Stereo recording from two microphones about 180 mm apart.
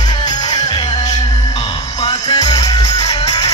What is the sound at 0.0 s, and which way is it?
Music, 20° left (ahead or behind).